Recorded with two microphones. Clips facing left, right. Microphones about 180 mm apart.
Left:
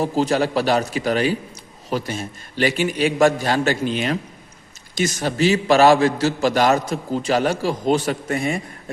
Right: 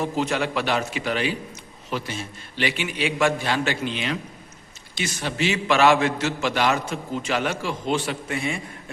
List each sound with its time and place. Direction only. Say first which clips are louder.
0.0 s a man's voice: left 5 dB; 35° left (ahead or behind)